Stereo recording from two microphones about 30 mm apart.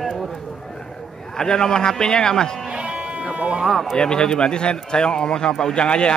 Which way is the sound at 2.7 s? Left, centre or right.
Right.